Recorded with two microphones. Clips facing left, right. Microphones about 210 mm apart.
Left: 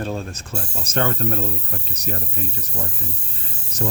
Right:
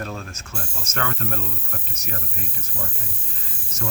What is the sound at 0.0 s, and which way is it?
Speech, 30° left (ahead or behind).